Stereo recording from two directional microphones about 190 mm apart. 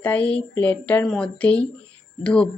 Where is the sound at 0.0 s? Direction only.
10° left (ahead or behind).